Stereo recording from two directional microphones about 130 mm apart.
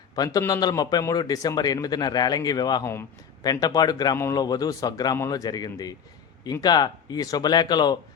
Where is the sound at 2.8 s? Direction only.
20° left (ahead or behind).